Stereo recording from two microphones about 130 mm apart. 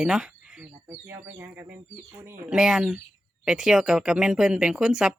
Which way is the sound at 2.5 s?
5° right (ahead or behind).